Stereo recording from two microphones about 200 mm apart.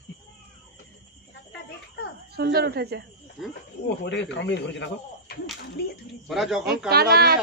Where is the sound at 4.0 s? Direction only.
65° left (ahead or behind).